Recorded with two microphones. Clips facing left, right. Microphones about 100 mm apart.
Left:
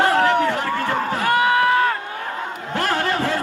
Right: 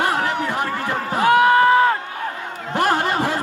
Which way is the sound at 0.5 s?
15° right (ahead or behind).